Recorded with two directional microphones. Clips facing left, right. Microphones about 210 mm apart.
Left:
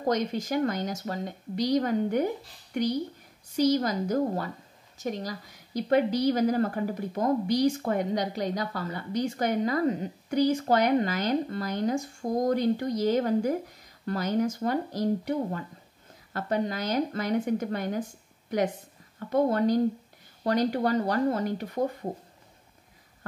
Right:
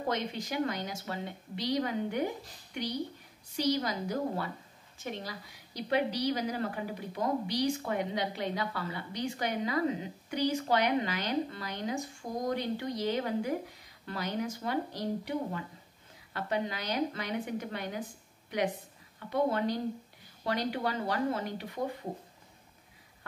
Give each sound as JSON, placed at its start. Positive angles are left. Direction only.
{"t": 0.0, "sound": "a woman's voice", "side_deg": 45}
{"t": 3.5, "sound": "a woman's voice", "side_deg": 45}